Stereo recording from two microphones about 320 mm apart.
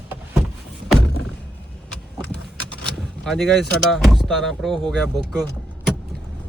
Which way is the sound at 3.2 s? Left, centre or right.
Centre.